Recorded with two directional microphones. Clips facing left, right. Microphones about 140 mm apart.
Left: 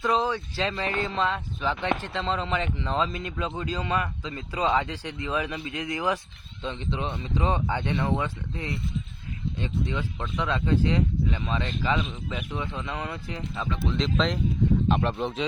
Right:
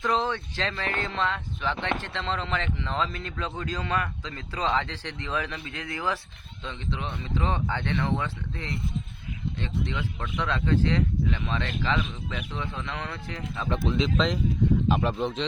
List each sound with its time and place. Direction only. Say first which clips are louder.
0.0 s speech: left 1 dB; 10° left (ahead or behind)
13.9 s speech: even; centre (ahead or behind)